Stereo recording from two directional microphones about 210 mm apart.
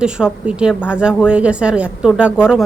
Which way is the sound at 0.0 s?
5° right (ahead or behind).